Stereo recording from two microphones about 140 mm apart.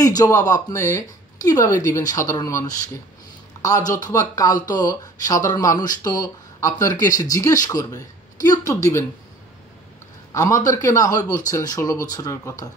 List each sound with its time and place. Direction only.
0.0 s speech: 25° left (ahead or behind)
10.3 s speech: 20° left (ahead or behind)